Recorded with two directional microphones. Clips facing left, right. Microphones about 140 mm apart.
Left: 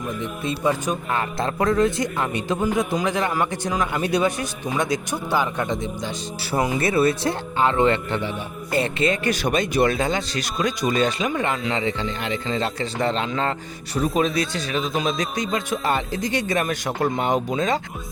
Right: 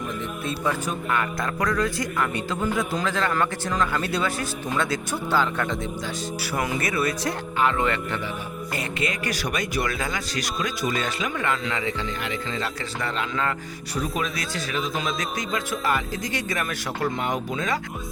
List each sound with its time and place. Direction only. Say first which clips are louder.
0.2 s speech: left 3 dB; 20° left (ahead or behind)